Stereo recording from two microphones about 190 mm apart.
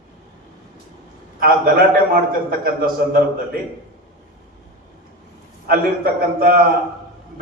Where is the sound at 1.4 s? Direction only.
55° right (ahead or behind).